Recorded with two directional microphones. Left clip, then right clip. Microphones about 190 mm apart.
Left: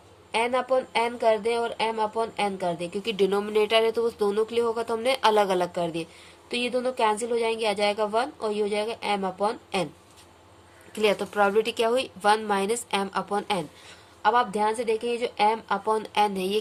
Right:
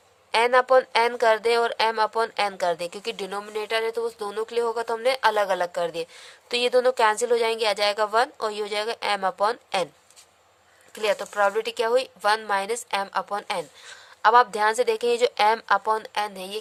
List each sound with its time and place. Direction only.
0.3 s a woman's voice: 50° right (ahead or behind)
10.9 s a woman's voice: 40° right (ahead or behind)